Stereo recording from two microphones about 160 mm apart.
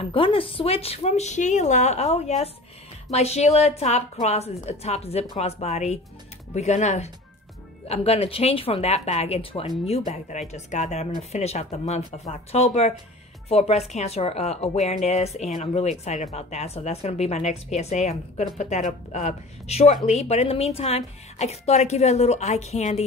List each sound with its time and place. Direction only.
0.0 s speech: 35° left (ahead or behind)